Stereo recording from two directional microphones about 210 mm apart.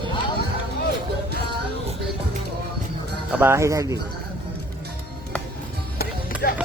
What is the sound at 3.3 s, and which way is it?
Speech, 10° right (ahead or behind).